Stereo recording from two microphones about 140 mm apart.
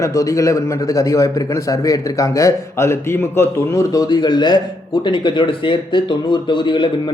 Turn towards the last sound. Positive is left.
turn(degrees=35)  # may be behind; listen again after turning